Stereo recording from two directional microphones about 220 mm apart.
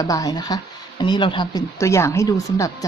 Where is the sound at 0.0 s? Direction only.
15° left (ahead or behind).